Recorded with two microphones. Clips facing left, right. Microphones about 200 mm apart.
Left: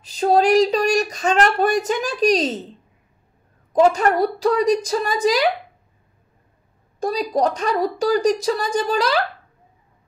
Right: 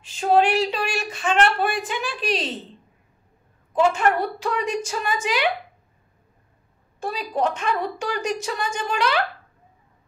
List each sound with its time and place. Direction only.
0.0 s speech: 40° left (ahead or behind)
3.7 s speech: 40° left (ahead or behind)
7.0 s speech: 40° left (ahead or behind)